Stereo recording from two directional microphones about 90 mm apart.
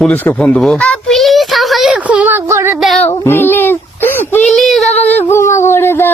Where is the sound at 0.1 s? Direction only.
15° left (ahead or behind).